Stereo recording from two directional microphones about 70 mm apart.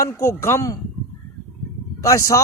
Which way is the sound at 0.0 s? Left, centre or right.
Left.